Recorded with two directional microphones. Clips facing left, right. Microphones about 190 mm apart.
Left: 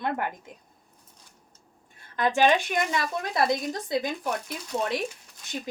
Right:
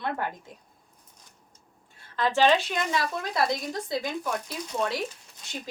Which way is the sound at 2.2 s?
15° left (ahead or behind).